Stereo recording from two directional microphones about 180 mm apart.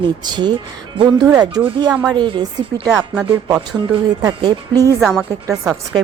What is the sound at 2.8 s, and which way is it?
Speech, 5° right (ahead or behind).